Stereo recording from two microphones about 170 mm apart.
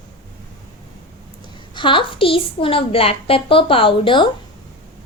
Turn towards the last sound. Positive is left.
turn(degrees=30)  # may be behind; listen again after turning